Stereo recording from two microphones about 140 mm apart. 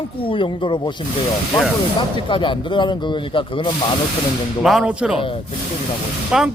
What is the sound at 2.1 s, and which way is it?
Speech, 35° left (ahead or behind).